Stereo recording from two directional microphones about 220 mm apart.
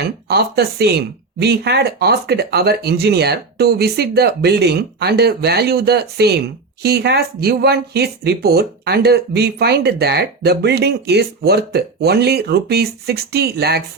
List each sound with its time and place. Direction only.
0.3 s speech: 45° right (ahead or behind)